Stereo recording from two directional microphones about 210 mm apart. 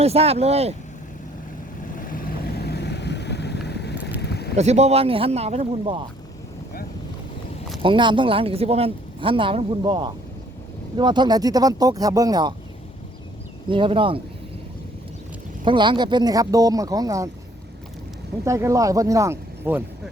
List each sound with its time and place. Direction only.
0.0 s speech: 30° right (ahead or behind)
2.0 s vehicle: 40° left (ahead or behind)
4.5 s speech: 30° right (ahead or behind)
7.8 s speech: 25° right (ahead or behind)
13.7 s speech: 25° right (ahead or behind)
15.6 s speech: 25° right (ahead or behind)
18.4 s speech: 15° right (ahead or behind)